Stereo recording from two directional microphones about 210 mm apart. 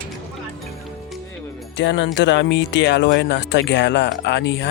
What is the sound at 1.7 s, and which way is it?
Speech, 60° left (ahead or behind).